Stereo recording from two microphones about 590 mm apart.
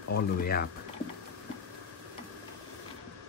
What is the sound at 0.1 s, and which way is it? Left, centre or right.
Speech, centre.